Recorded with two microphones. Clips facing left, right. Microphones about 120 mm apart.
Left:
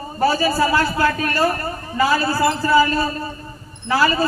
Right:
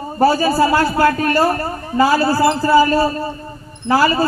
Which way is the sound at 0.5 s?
45° right (ahead or behind).